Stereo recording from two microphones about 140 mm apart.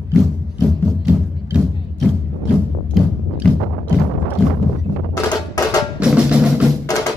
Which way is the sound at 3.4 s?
5° left (ahead or behind).